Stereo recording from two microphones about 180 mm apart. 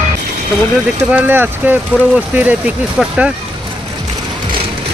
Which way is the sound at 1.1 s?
10° right (ahead or behind).